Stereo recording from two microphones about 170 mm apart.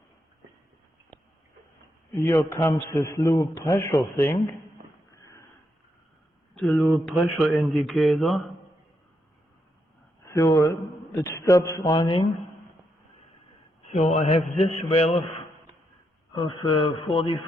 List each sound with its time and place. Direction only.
2.1 s a man's voice: 15° left (ahead or behind)
6.5 s speech: 5° left (ahead or behind)
10.2 s a man's voice: 20° left (ahead or behind)
13.9 s speech: 40° left (ahead or behind)